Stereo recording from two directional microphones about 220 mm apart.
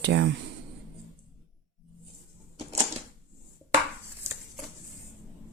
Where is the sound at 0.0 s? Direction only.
50° right (ahead or behind).